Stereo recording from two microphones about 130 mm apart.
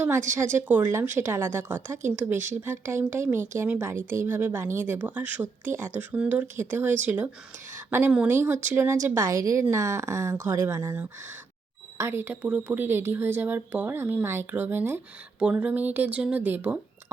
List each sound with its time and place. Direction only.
0.3 s a woman's voice: 15° right (ahead or behind)
11.9 s a woman's voice: 20° right (ahead or behind)